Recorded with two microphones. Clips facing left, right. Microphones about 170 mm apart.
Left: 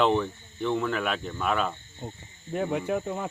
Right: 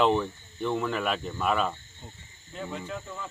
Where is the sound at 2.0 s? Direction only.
55° left (ahead or behind).